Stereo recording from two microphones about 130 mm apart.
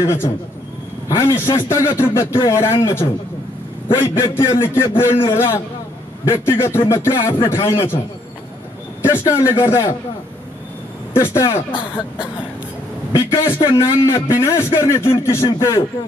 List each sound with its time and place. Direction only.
0.0 s a man's voice: 20° left (ahead or behind)
9.0 s a man's voice: 20° left (ahead or behind)
11.1 s a man's voice: 20° left (ahead or behind)
13.1 s a man's voice: 20° left (ahead or behind)